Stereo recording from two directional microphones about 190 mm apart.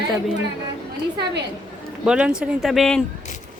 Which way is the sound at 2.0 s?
5° right (ahead or behind).